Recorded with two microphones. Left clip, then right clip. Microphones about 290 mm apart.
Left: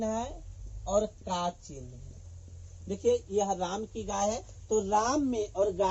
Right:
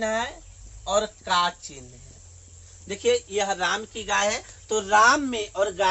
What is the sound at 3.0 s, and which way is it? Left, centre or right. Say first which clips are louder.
Speech: right 4 dB; right.